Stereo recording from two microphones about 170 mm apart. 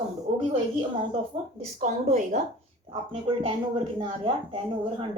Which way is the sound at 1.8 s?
45° right (ahead or behind).